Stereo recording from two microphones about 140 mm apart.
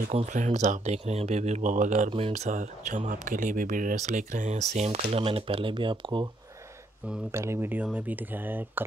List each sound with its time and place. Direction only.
0.1 s speech: 55° right (ahead or behind)
2.0 s speech: 45° right (ahead or behind)
7.2 s speech: 20° right (ahead or behind)